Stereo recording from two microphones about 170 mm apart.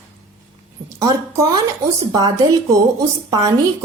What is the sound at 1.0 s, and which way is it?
A woman's voice, 20° right (ahead or behind).